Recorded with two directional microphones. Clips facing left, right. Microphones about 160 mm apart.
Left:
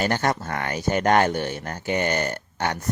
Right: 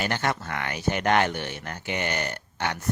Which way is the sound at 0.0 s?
40° left (ahead or behind).